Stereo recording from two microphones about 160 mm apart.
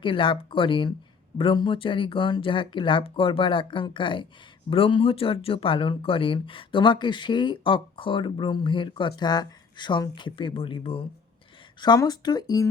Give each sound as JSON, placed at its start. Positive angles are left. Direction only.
{"t": 0.0, "sound": "speech", "side_deg": 30}